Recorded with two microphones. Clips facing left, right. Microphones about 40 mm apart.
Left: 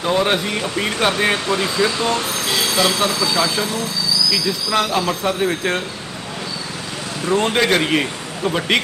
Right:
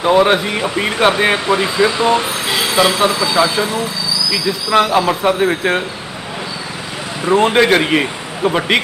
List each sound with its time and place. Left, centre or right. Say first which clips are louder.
0.0 s speech: right 6 dB; right
7.3 s speech: right 5 dB; centre